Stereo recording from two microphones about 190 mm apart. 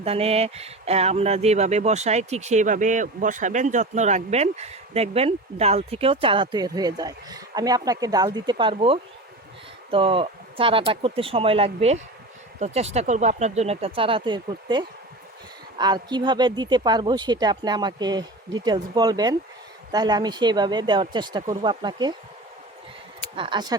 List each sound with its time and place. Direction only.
0.0 s speech: 30° right (ahead or behind)
23.3 s speech: 25° right (ahead or behind)